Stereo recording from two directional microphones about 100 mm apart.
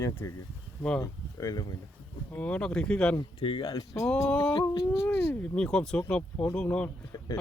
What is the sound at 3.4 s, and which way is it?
Speech, 60° left (ahead or behind).